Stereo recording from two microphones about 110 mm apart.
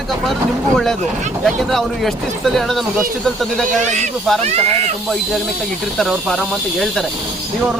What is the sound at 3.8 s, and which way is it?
A man's voice, 90° right.